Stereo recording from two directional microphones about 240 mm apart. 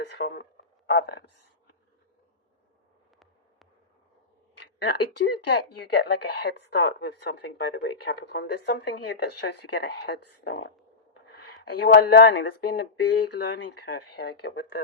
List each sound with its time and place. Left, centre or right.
0.0 s speech: left
4.8 s speech: left